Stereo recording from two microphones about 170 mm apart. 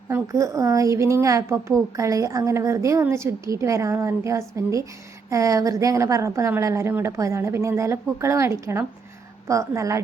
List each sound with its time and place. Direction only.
0.1 s a woman's voice: 20° right (ahead or behind)